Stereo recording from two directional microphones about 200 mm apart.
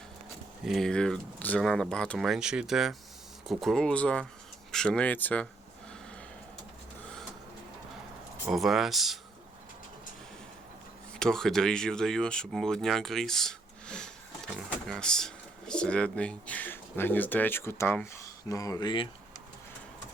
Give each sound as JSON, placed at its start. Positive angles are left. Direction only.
{"t": 0.6, "sound": "speech", "side_deg": 0}
{"t": 8.4, "sound": "speech", "side_deg": 0}
{"t": 11.2, "sound": "speech", "side_deg": 5}